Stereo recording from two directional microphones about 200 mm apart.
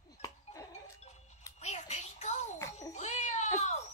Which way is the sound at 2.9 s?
35° left (ahead or behind).